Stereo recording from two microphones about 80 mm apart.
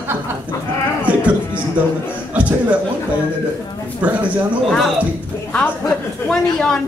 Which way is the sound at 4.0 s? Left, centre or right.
Centre.